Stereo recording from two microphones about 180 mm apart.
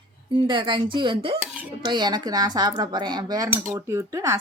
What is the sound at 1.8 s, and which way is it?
Speech, 25° right (ahead or behind).